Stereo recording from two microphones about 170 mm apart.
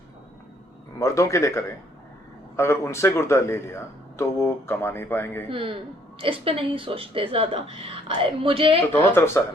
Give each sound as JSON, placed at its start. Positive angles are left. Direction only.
{"t": 0.9, "sound": "speech", "side_deg": 15}
{"t": 5.5, "sound": "speech", "side_deg": -30}
{"t": 8.9, "sound": "speech", "side_deg": 10}